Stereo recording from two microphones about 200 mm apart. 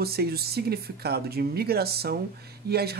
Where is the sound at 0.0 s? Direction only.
50° right (ahead or behind).